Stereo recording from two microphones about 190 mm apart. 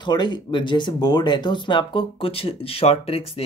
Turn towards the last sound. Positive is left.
turn(degrees=30)  # may be behind; listen again after turning